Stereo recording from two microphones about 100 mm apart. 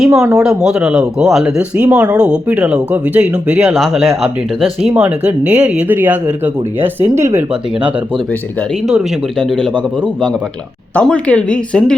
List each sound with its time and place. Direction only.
0.1 s speech: 30° right (ahead or behind)
0.3 s speech: 5° right (ahead or behind)
3.8 s speech: centre (ahead or behind); by 7.4 s 25° right (ahead or behind)
7.5 s speech: 15° right (ahead or behind)
9.4 s speech: 5° left (ahead or behind)